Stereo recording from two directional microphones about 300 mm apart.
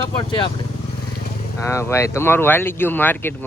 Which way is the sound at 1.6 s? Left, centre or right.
Centre.